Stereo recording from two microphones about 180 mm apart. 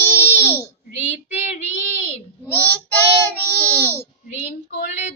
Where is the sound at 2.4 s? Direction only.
10° left (ahead or behind).